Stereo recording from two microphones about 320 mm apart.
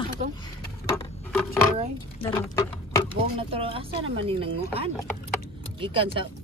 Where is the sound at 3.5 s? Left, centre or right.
Centre.